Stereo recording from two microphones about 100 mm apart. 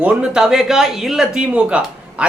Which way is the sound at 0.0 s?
10° right (ahead or behind).